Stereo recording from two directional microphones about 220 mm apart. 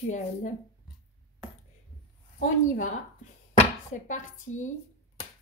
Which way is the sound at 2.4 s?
35° left (ahead or behind).